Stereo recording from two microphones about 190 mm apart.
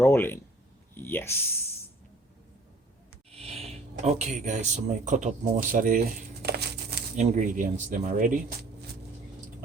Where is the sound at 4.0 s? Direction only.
35° right (ahead or behind).